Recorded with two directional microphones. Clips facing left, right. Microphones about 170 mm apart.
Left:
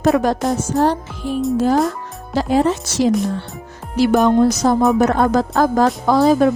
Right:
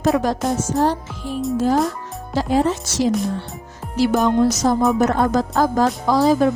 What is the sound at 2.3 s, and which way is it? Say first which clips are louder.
Speech: left 2 dB; 70° left (ahead or behind).